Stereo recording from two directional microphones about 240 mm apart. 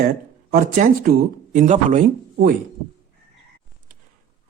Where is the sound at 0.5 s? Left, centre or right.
Right.